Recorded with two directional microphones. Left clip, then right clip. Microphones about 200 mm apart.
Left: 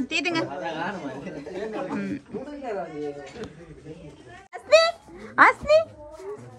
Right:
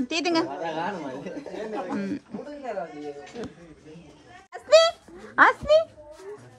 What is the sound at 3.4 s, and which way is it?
Speech, 40° right (ahead or behind).